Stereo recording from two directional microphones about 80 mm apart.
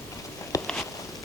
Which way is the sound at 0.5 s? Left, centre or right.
Left.